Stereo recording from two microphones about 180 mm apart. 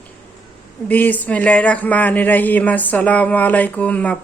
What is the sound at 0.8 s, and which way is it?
Speech, 10° left (ahead or behind).